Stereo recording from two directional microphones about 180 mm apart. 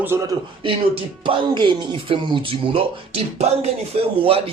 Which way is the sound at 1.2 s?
25° right (ahead or behind).